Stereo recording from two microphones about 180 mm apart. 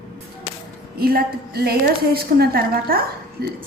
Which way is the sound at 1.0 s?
55° right (ahead or behind).